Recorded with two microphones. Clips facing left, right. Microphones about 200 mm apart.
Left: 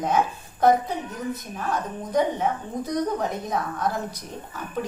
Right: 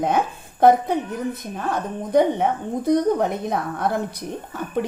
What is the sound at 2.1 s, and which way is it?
A woman's voice, 60° right (ahead or behind).